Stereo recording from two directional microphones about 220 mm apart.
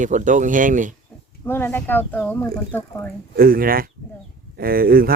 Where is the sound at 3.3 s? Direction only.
40° right (ahead or behind).